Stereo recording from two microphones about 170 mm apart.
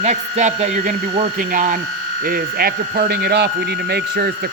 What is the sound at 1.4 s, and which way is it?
Speech, 50° right (ahead or behind).